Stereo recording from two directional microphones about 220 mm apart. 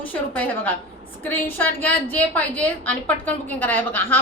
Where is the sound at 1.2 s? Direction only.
10° left (ahead or behind).